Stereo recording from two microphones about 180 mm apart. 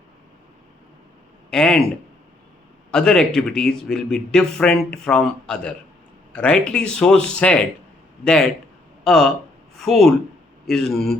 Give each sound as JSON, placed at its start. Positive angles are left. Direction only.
{"t": 1.5, "sound": "speech", "side_deg": 5}
{"t": 2.9, "sound": "a man's voice", "side_deg": 5}